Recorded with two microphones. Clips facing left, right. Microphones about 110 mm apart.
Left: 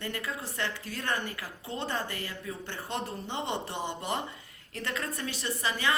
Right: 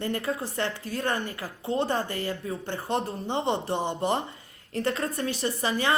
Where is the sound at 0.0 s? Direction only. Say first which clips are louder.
Right 7 dB; 30° right (ahead or behind).